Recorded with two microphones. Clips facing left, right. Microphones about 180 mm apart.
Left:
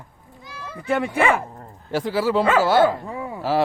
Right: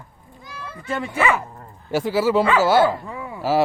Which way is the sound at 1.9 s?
10° right (ahead or behind).